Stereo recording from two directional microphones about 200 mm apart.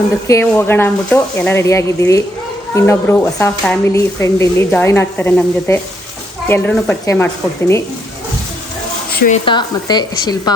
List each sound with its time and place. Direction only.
0.3 s speech: 10° left (ahead or behind)
9.1 s speech: 45° left (ahead or behind)
9.5 s speech: 20° left (ahead or behind)